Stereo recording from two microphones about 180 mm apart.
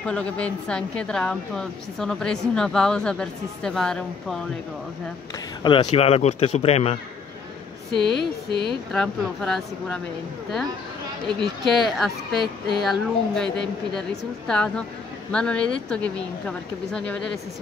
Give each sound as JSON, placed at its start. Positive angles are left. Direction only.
{"t": 0.0, "sound": "a woman's voice", "side_deg": 5}
{"t": 5.6, "sound": "speech", "side_deg": 25}
{"t": 8.0, "sound": "speech", "side_deg": -25}
{"t": 8.9, "sound": "a woman's voice", "side_deg": 5}
{"t": 11.2, "sound": "a woman's voice", "side_deg": 0}